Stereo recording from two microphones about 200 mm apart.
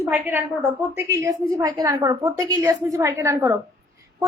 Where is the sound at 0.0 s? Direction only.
10° right (ahead or behind).